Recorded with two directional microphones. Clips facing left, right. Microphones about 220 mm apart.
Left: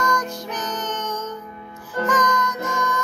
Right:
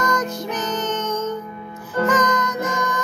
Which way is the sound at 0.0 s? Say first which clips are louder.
Right 2 dB; 20° right (ahead or behind).